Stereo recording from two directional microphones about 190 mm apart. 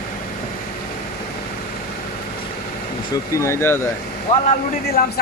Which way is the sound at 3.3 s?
15° left (ahead or behind).